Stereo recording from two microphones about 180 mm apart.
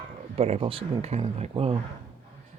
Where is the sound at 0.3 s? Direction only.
35° right (ahead or behind).